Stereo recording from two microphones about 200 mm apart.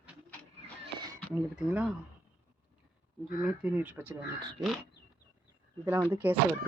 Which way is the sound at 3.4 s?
5° right (ahead or behind).